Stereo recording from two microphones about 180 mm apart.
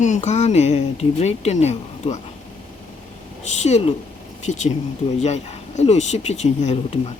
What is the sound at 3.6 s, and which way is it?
Speech, 40° left (ahead or behind).